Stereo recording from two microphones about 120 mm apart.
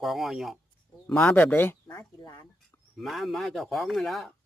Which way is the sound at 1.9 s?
35° left (ahead or behind).